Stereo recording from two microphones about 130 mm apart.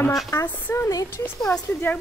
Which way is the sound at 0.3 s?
20° left (ahead or behind).